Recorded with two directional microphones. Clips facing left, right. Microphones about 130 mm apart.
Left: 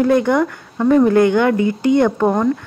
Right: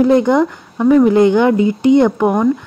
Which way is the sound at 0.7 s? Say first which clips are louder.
Right 3 dB; 10° right (ahead or behind).